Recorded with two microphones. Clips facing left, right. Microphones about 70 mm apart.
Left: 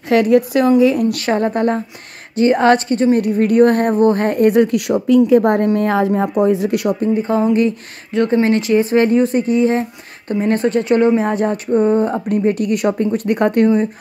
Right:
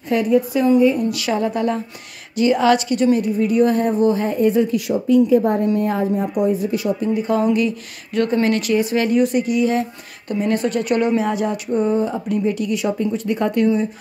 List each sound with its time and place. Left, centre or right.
0.1 s speech: left
1.1 s speech: left
3.2 s a woman's voice: left
7.0 s speech: left